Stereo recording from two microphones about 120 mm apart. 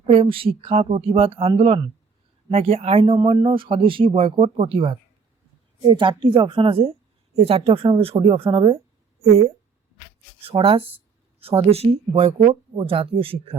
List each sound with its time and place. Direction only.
0.0 s speech: 55° right (ahead or behind)
9.2 s speech: 60° right (ahead or behind)